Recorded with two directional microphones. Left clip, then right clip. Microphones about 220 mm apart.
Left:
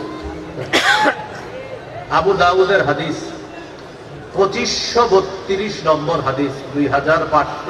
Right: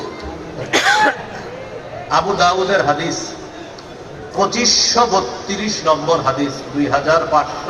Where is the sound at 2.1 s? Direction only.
50° right (ahead or behind).